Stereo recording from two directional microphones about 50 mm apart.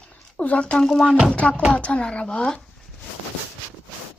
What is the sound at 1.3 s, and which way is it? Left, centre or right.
Speech, left.